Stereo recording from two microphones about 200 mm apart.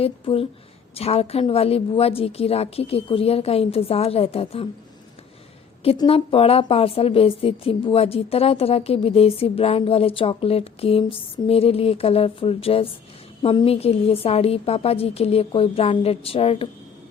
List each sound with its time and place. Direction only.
0.0 s a woman's voice: 30° left (ahead or behind)
5.8 s a woman's voice: 30° left (ahead or behind)